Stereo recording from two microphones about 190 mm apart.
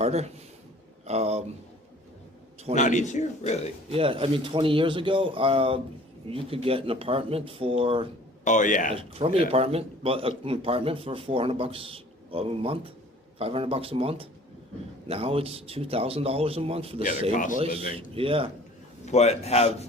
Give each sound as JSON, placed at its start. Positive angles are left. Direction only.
{"t": 0.0, "sound": "speech", "side_deg": -35}
{"t": 2.7, "sound": "a man's voice", "side_deg": 40}
{"t": 3.9, "sound": "speech", "side_deg": -30}
{"t": 8.4, "sound": "speech", "side_deg": 40}
{"t": 9.0, "sound": "speech", "side_deg": -30}
{"t": 17.3, "sound": "speech", "side_deg": 45}
{"t": 17.6, "sound": "speech", "side_deg": -30}
{"t": 19.0, "sound": "a man's voice", "side_deg": 35}